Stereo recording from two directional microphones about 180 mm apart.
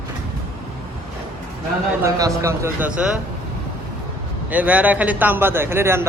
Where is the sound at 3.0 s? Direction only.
5° right (ahead or behind).